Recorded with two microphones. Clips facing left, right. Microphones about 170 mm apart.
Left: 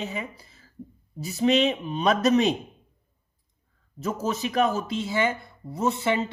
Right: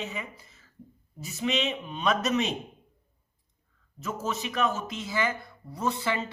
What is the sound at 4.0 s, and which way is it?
Speech, 35° left (ahead or behind).